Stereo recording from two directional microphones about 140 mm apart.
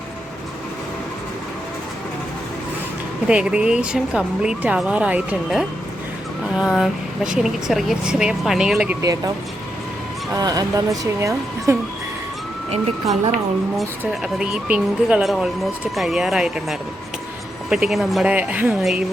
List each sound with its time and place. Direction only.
3.2 s speech: 5° right (ahead or behind)
9.0 s speech: 25° right (ahead or behind)
10.3 s speech: 25° right (ahead or behind)
14.1 s speech: 5° right (ahead or behind)
18.8 s speech: centre (ahead or behind)